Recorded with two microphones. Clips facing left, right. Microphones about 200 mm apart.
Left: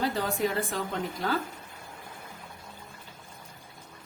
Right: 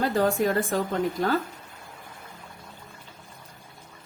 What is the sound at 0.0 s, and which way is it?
Speech, 50° right (ahead or behind).